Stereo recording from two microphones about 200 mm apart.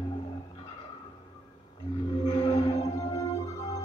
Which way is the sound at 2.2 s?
20° left (ahead or behind).